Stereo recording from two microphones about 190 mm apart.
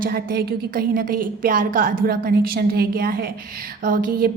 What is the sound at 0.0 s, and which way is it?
A woman's voice, 50° right (ahead or behind).